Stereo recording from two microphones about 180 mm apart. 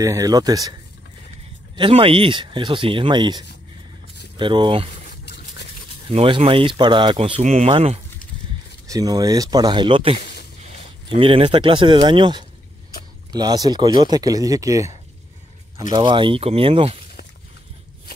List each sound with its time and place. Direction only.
0.0 s speech: 20° right (ahead or behind)
1.8 s speech: 30° right (ahead or behind)
5.2 s a sound: 70° left (ahead or behind)
6.1 s speech: 30° right (ahead or behind)
8.8 s speech: 20° right (ahead or behind)